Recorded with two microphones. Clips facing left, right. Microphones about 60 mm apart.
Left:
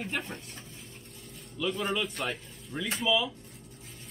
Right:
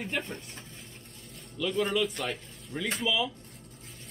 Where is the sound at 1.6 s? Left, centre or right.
Centre.